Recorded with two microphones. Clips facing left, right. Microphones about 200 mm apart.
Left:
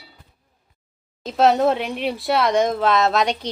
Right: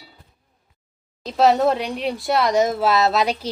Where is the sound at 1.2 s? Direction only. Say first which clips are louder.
Even; centre (ahead or behind).